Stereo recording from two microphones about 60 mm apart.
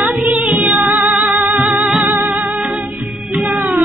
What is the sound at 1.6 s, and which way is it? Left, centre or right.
Music, right.